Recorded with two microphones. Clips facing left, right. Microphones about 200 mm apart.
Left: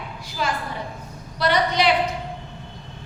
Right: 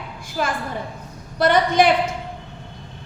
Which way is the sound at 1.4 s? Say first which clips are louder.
Right 4 dB; 50° right (ahead or behind).